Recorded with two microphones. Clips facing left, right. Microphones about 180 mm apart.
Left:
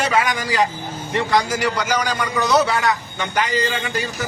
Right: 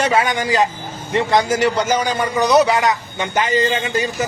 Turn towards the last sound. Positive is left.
turn(degrees=-20)  # may be behind; listen again after turning